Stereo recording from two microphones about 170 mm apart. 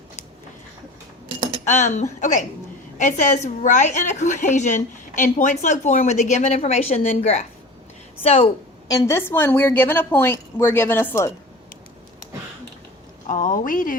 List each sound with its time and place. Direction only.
1.6 s a woman's voice: 40° left (ahead or behind)
8.9 s a woman's voice: 20° left (ahead or behind)
13.2 s a woman's voice: 50° left (ahead or behind)